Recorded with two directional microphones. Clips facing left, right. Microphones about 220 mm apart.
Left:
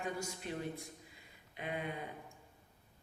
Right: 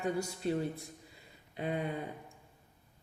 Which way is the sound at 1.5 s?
35° right (ahead or behind).